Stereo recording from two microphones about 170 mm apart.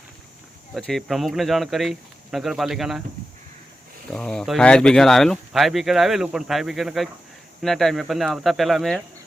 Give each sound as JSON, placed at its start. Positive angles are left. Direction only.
{"t": 0.7, "sound": "speech", "side_deg": 0}
{"t": 4.1, "sound": "speech", "side_deg": 5}